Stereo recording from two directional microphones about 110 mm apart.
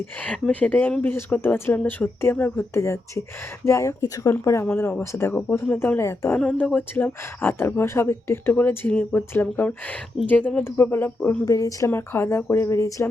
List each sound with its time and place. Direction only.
0.0 s speech: 10° left (ahead or behind)
6.0 s speech: 25° left (ahead or behind)
6.4 s speech: 10° left (ahead or behind)
11.4 s speech: 30° left (ahead or behind)